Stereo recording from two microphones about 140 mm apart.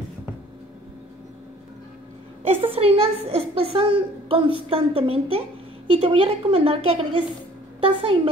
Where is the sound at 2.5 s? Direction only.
45° right (ahead or behind).